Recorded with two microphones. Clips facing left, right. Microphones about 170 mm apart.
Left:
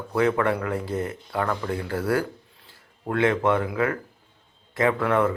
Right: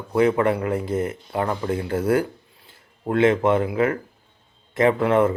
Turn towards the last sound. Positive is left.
turn(degrees=-20)  # may be behind; listen again after turning